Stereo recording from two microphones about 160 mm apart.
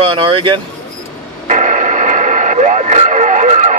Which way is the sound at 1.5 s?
50° right (ahead or behind).